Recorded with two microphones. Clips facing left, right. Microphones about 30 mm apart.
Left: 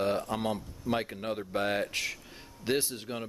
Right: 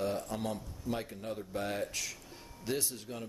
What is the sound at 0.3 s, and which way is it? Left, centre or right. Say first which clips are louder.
Speech: left 5 dB; left.